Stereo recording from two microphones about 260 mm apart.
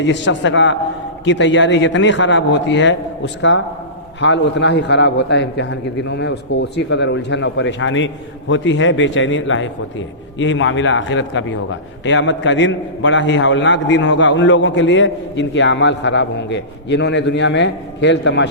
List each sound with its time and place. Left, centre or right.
0.0 s a man's voice: left